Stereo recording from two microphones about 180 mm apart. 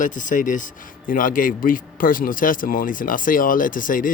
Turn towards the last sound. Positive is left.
turn(degrees=50)  # may be behind; listen again after turning